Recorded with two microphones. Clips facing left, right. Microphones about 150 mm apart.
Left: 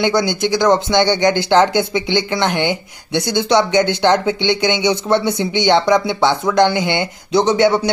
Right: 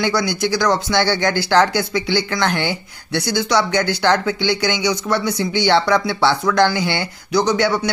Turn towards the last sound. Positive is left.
turn(degrees=20)  # may be behind; listen again after turning